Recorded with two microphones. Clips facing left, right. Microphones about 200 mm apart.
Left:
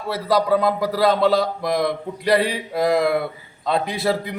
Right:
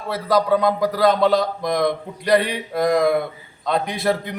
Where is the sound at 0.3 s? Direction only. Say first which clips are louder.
Right 1 dB; 5° left (ahead or behind).